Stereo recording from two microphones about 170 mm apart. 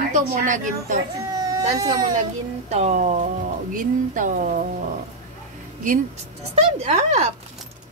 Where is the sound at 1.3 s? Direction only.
20° right (ahead or behind).